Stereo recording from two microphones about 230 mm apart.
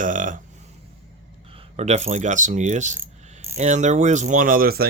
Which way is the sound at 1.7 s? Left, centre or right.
Right.